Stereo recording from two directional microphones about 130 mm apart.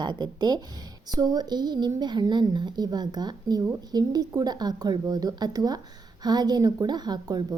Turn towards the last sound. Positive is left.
turn(degrees=-30)  # may be behind; listen again after turning